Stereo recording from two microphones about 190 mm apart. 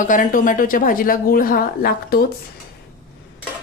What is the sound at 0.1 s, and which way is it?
A woman's voice, 45° left (ahead or behind).